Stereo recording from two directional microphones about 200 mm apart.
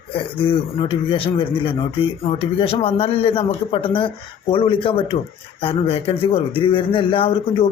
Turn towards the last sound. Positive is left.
turn(degrees=25)  # may be behind; listen again after turning